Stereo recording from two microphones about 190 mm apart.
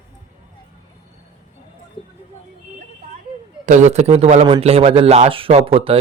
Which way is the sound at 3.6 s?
40° right (ahead or behind).